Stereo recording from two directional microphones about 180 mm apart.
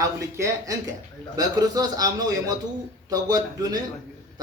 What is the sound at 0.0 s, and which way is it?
A man's voice, 15° right (ahead or behind).